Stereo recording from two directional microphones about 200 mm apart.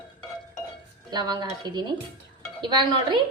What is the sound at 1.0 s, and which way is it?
Speech, 20° right (ahead or behind).